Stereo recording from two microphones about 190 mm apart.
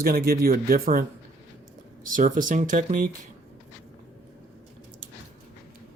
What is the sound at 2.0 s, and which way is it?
Speech, 45° right (ahead or behind).